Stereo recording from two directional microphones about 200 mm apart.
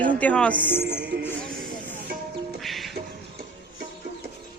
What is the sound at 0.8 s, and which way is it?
Music, 55° right (ahead or behind).